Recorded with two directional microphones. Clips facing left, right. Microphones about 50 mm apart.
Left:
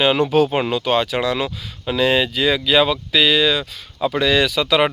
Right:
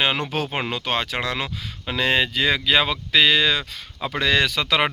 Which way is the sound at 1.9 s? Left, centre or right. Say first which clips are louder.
Left 4 dB; right.